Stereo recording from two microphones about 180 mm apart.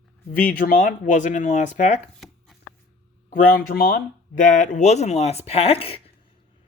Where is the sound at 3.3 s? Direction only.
55° left (ahead or behind); by 6.0 s 30° left (ahead or behind).